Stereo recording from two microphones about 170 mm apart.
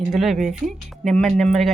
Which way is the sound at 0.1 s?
Centre (ahead or behind).